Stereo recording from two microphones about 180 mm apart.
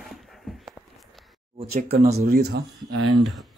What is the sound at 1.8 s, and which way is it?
Speech, 50° right (ahead or behind).